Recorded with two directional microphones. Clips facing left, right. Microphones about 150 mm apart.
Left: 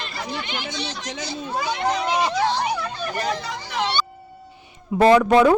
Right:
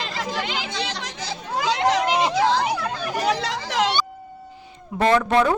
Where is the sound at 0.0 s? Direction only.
90° right.